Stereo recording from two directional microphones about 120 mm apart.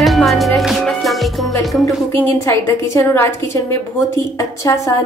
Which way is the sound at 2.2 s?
20° left (ahead or behind).